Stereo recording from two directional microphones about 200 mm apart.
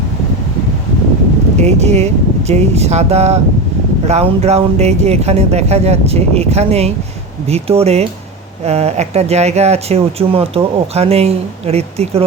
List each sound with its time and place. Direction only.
1.6 s speech: 35° right (ahead or behind)